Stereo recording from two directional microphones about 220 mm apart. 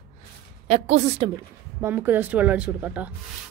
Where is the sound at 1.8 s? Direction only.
10° right (ahead or behind).